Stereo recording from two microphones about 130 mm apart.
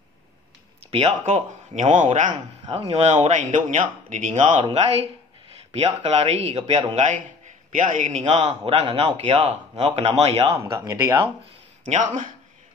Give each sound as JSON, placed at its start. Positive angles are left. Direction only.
{"t": 1.0, "sound": "speech", "side_deg": -60}
{"t": 5.7, "sound": "speech", "side_deg": -55}
{"t": 7.2, "sound": "a man's voice", "side_deg": -75}
{"t": 8.6, "sound": "speech", "side_deg": -50}
{"t": 10.6, "sound": "speech", "side_deg": -20}
{"t": 11.8, "sound": "speech", "side_deg": -70}